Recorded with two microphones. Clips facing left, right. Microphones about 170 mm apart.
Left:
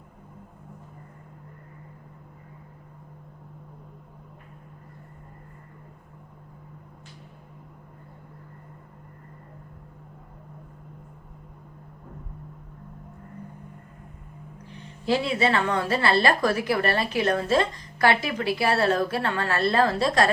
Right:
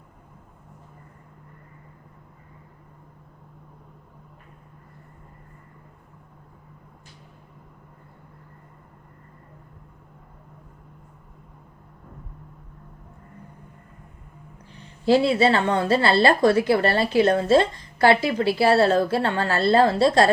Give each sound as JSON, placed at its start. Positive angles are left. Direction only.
{"t": 15.0, "sound": "a woman's voice", "side_deg": -30}